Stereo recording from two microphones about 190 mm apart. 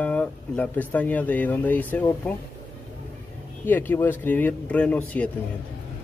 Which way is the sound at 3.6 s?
10° left (ahead or behind).